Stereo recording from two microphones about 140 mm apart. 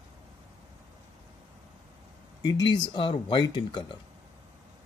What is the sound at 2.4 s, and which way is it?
Speech, 30° left (ahead or behind).